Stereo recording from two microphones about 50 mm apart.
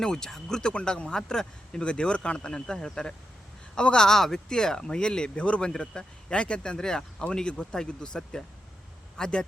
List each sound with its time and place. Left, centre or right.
0.0 s speech: centre